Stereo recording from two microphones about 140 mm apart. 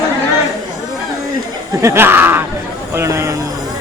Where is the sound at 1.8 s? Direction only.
15° right (ahead or behind).